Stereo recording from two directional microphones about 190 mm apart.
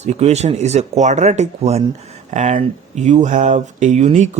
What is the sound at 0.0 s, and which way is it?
Speech, 35° right (ahead or behind).